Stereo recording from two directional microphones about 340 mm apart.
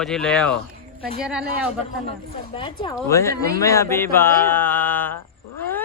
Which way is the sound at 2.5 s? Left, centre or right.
Centre.